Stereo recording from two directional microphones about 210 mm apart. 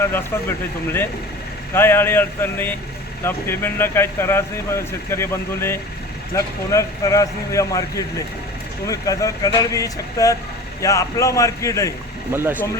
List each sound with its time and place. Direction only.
0.0 s speech: 10° left (ahead or behind)
1.7 s speech: 10° left (ahead or behind)
12.3 s speech: 10° right (ahead or behind)